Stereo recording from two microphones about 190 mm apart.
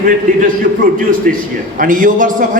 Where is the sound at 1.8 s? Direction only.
45° right (ahead or behind).